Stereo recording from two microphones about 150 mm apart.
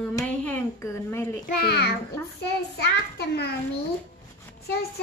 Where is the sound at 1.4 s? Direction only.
90° left.